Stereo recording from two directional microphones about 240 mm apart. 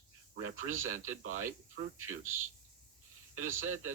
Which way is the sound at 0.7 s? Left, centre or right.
Right.